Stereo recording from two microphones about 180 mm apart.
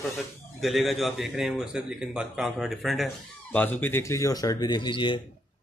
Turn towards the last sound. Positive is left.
turn(degrees=25)  # may be behind; listen again after turning